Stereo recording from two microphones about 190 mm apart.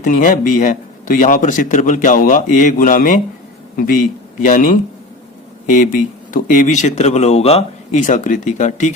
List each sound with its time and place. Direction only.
0.0 s a man's voice: 45° left (ahead or behind)